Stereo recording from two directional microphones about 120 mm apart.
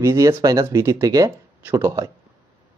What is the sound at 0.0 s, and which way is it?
Speech, 25° right (ahead or behind).